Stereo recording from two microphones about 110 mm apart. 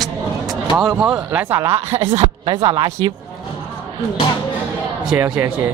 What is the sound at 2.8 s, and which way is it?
Speech, 30° right (ahead or behind).